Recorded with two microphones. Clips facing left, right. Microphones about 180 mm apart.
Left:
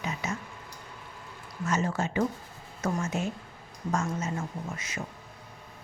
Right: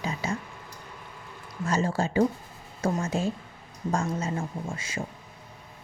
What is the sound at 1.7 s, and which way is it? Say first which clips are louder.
Speech: right 2 dB; 30° right (ahead or behind).